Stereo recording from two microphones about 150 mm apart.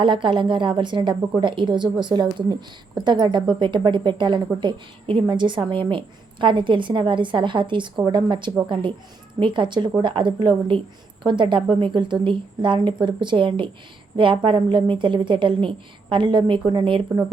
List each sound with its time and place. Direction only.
0.0 s a woman's voice: 30° right (ahead or behind)